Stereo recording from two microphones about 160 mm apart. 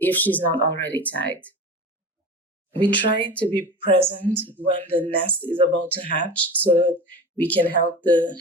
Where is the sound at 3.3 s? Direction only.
10° left (ahead or behind).